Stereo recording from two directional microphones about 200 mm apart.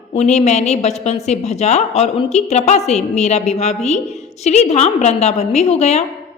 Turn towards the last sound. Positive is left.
turn(degrees=35)  # may be behind; listen again after turning